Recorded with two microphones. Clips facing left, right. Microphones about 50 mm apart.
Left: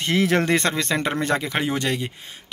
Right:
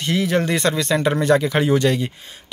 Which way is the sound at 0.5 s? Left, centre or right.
Left.